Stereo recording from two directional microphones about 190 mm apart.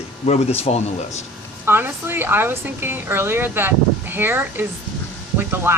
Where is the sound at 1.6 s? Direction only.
10° right (ahead or behind).